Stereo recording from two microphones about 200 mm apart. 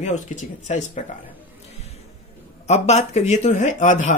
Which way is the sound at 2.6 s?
35° left (ahead or behind).